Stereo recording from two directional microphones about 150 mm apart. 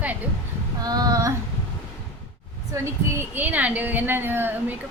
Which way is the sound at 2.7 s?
20° right (ahead or behind).